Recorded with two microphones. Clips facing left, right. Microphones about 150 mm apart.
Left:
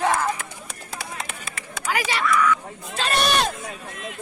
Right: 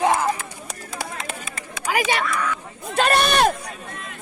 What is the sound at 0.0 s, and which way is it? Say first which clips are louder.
Run: right 2 dB; 15° right (ahead or behind).